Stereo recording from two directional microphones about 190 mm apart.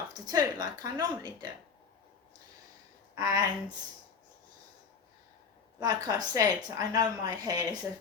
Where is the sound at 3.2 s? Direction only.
20° right (ahead or behind).